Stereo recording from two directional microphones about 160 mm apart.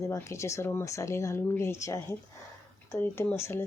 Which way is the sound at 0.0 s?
20° left (ahead or behind).